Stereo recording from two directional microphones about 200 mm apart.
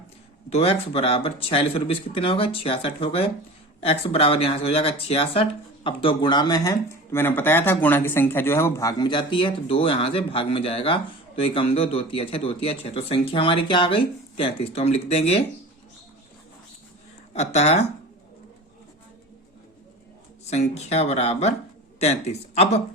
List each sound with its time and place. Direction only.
0.5 s speech: 30° left (ahead or behind)
17.3 s speech: 35° left (ahead or behind)
20.5 s speech: 35° left (ahead or behind)